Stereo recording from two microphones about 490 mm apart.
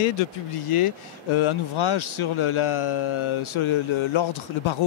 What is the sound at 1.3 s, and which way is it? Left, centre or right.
Speech, left.